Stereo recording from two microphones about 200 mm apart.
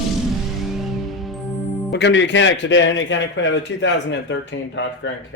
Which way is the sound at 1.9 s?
60° left (ahead or behind).